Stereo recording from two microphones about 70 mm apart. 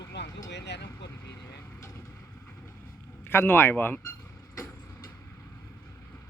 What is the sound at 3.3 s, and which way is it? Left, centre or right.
Speech, left.